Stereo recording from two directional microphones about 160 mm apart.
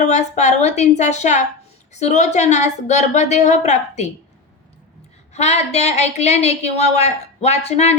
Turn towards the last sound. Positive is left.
turn(degrees=45)  # may be behind; listen again after turning